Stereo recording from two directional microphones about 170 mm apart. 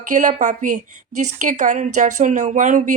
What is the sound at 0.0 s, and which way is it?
Speech, 50° right (ahead or behind).